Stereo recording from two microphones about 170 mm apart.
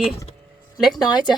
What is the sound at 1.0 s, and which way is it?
Speech, 25° left (ahead or behind).